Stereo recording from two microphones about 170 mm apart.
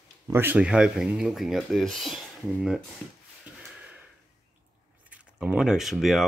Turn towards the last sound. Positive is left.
turn(degrees=0)  # may be behind; listen again after turning